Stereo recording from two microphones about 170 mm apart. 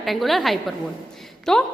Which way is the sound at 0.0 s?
Centre (ahead or behind).